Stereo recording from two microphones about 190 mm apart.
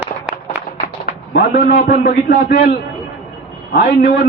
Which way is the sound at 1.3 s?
55° left (ahead or behind).